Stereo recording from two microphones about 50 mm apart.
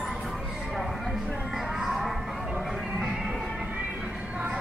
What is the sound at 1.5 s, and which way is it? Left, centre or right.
Music, centre.